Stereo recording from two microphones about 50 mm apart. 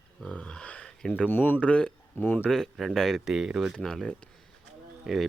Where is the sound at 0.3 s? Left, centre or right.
Centre.